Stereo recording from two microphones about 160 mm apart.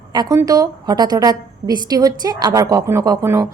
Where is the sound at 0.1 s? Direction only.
25° right (ahead or behind).